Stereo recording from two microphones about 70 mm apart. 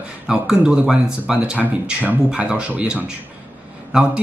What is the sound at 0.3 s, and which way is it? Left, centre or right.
Speech, centre.